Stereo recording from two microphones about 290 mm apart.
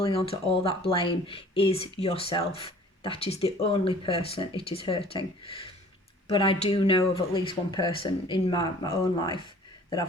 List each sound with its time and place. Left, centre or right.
0.0 s speech: centre